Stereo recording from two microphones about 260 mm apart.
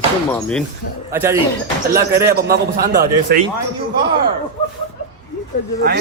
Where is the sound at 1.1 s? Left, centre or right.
Centre.